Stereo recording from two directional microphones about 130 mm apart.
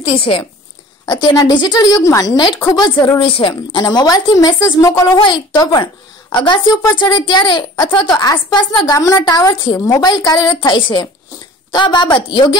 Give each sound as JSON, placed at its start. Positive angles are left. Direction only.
{"t": 0.0, "sound": "speech", "side_deg": 40}
{"t": 8.8, "sound": "speech", "side_deg": 25}